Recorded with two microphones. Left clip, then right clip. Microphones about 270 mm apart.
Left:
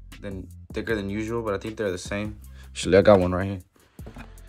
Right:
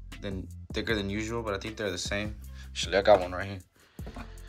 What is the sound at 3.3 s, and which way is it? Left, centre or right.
Music, centre.